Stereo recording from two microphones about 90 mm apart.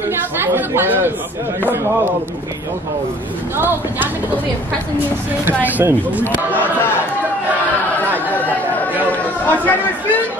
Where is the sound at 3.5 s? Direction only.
25° right (ahead or behind).